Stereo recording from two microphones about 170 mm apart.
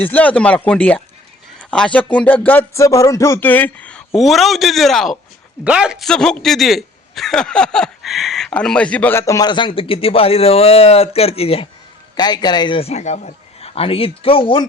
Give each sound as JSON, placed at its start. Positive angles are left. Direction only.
{"t": 0.0, "sound": "a man's voice", "side_deg": 10}
{"t": 12.1, "sound": "a man's voice", "side_deg": 25}